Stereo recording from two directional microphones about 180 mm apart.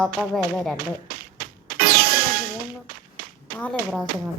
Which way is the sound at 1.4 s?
55° right (ahead or behind).